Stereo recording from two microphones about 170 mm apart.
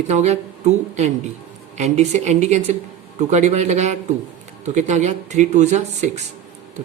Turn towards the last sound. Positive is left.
turn(degrees=-40)  # may be behind; listen again after turning